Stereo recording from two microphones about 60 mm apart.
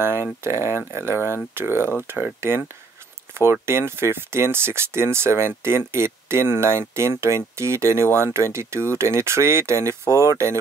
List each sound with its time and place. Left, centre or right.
0.0 s speech: right
3.6 s speech: right